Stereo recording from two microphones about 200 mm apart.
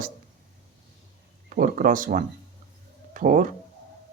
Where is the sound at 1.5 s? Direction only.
40° right (ahead or behind).